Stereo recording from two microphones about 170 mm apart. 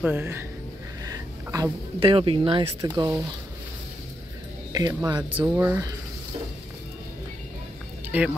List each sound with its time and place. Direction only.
0.0 s speech: 15° right (ahead or behind)
4.7 s speech: 20° right (ahead or behind)
5.4 s speech: 10° right (ahead or behind)
8.1 s speech: 10° right (ahead or behind)